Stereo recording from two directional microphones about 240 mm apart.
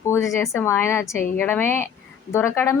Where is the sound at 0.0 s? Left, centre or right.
Centre.